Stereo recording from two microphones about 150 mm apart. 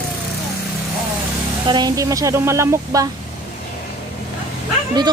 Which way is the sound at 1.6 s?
30° right (ahead or behind).